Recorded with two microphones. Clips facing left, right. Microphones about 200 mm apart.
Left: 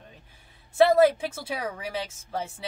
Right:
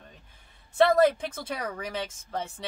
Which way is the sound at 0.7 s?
10° left (ahead or behind).